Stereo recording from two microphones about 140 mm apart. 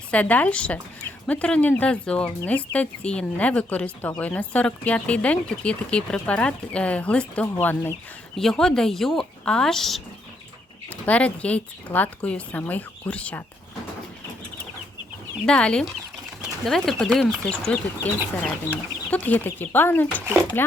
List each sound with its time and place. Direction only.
0.1 s speech: 10° left (ahead or behind)
8.4 s speech: 5° left (ahead or behind)
15.4 s speech: 5° left (ahead or behind)
20.2 s speech: 15° right (ahead or behind)